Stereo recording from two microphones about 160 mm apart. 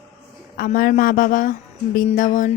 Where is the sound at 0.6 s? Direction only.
60° left (ahead or behind).